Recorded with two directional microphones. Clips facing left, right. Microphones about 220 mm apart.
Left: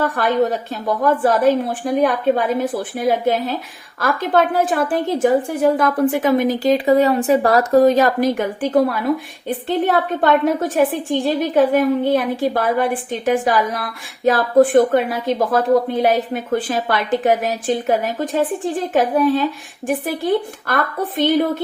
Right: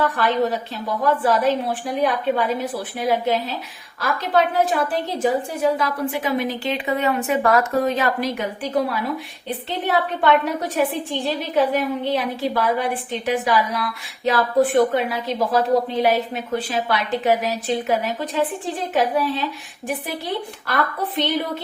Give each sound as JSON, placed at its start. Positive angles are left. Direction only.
{"t": 0.0, "sound": "a woman's voice", "side_deg": 50}